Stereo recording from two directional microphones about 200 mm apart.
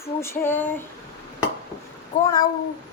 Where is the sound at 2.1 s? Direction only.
40° left (ahead or behind).